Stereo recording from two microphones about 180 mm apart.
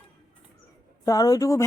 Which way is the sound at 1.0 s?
20° left (ahead or behind).